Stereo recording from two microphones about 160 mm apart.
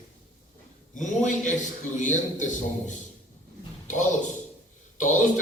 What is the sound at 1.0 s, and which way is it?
A man's voice, 50° left (ahead or behind).